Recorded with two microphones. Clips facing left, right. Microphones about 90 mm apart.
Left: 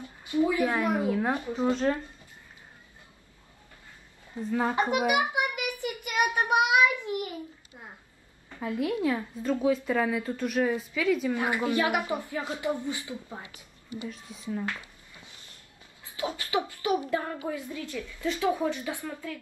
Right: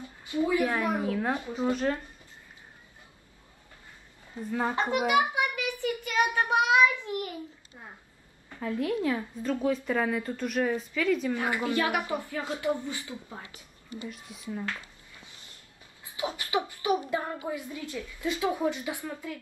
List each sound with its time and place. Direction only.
0.0 s a sound: 20° left (ahead or behind)
0.6 s a woman's voice: 15° left (ahead or behind)
4.4 s a woman's voice: 5° right (ahead or behind)
4.7 s a woman's voice: 15° left (ahead or behind)
5.3 s child singing: 20° left (ahead or behind)
8.5 s a woman's voice: 10° left (ahead or behind)
11.3 s a woman's voice: 15° left (ahead or behind)
14.0 s a woman's voice: 5° right (ahead or behind)
14.7 s a sound: 15° left (ahead or behind)
16.1 s a woman's voice: 20° right (ahead or behind)